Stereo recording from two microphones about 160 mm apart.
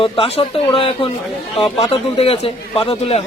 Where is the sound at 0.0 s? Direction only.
35° left (ahead or behind).